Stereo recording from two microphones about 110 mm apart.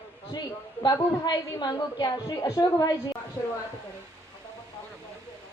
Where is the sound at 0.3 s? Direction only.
40° left (ahead or behind).